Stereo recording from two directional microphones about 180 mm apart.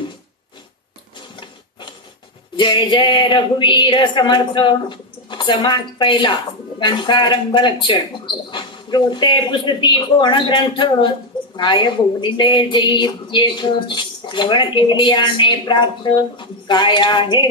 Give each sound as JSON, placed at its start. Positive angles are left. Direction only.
{"t": 1.3, "sound": "rub", "side_deg": 25}
{"t": 2.5, "sound": "a woman's voice", "side_deg": 25}